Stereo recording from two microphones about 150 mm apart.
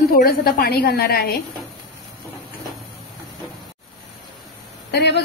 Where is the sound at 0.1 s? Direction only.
80° left.